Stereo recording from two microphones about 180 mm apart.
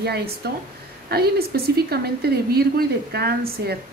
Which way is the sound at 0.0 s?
60° right (ahead or behind).